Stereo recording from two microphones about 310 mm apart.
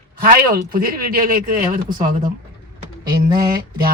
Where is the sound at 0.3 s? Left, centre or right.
Right.